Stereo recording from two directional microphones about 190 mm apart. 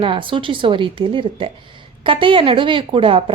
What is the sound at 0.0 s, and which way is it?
A woman's voice, 25° right (ahead or behind).